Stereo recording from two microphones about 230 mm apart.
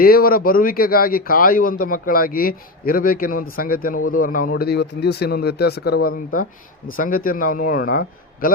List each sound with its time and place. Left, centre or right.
0.0 s a man's voice: left